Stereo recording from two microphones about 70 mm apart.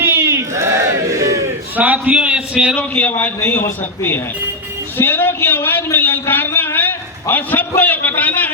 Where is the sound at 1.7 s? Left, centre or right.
Right.